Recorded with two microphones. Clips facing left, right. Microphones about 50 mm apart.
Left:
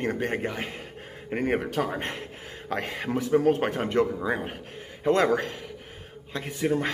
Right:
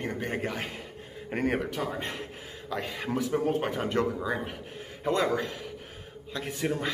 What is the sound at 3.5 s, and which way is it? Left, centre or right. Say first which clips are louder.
Speech: left 5 dB; left.